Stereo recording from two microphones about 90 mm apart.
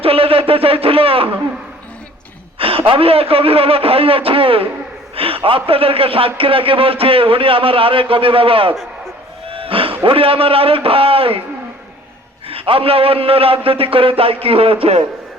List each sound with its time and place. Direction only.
0.0 s a sound: 90° right
2.6 s a man's voice: 90° right
9.5 s wild animals: 90° right
10.0 s a man's voice: 85° right
12.5 s a man's voice: 90° right